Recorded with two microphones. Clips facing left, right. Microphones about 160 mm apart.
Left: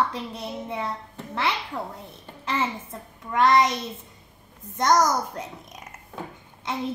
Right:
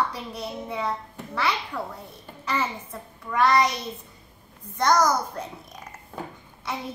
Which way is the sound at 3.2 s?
25° left (ahead or behind).